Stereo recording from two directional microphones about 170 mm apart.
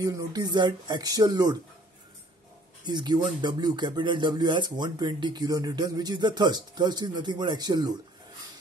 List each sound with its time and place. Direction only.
0.0 s speech: 20° right (ahead or behind)
2.8 s speech: 25° right (ahead or behind)